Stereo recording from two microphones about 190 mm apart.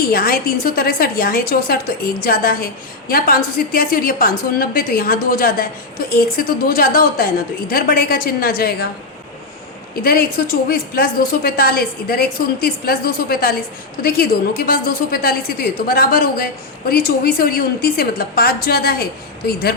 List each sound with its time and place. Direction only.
0.1 s a woman's voice: 50° left (ahead or behind)
9.9 s a woman's voice: 50° left (ahead or behind)